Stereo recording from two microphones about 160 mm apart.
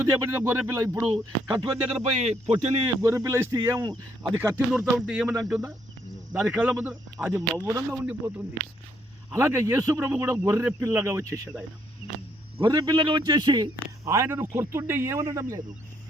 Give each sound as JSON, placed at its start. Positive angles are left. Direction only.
{"t": 0.0, "sound": "a man's voice", "side_deg": -15}
{"t": 2.1, "sound": "speech", "side_deg": -40}
{"t": 2.8, "sound": "a man's voice", "side_deg": -20}
{"t": 4.9, "sound": "speech", "side_deg": -5}
{"t": 9.3, "sound": "a man's voice", "side_deg": -20}
{"t": 12.5, "sound": "a man's voice", "side_deg": -25}